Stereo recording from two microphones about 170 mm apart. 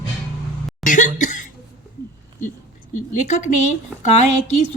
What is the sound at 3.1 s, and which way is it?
Speech, 45° left (ahead or behind).